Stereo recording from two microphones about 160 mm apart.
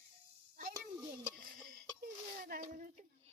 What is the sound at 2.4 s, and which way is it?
Speech, 60° right (ahead or behind).